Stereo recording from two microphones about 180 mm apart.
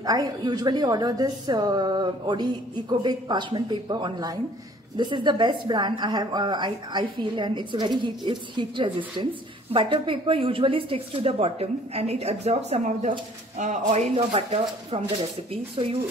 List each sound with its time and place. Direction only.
0.0 s a woman's voice: 20° right (ahead or behind)